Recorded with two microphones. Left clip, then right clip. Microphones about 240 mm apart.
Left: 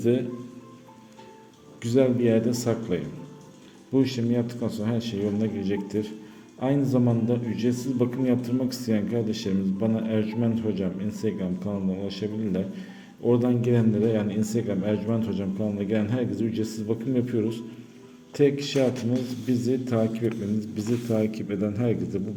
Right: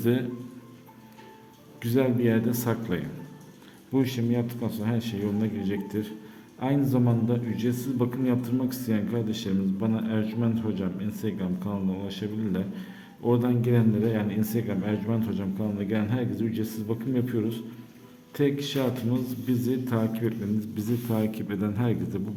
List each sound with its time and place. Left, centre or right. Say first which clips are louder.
0.0 s a man's voice: left 2 dB; centre
1.8 s a man's voice: left 3 dB; centre